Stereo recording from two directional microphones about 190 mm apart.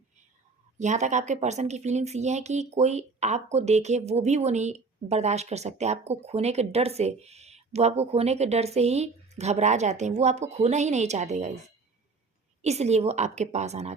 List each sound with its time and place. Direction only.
0.8 s a woman's voice: 40° right (ahead or behind)
12.6 s a woman's voice: 35° right (ahead or behind)